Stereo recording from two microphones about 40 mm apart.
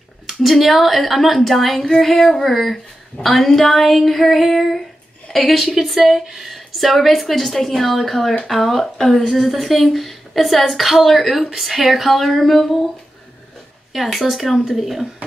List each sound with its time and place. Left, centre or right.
0.3 s a woman's voice: centre
13.9 s a woman's voice: centre